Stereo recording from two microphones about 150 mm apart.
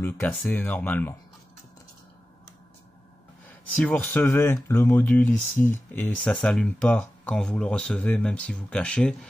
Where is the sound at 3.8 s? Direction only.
10° left (ahead or behind).